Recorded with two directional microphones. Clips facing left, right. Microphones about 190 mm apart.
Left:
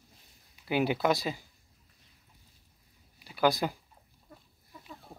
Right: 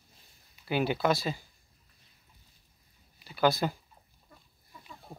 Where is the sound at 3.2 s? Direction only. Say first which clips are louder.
Even; 10° left (ahead or behind).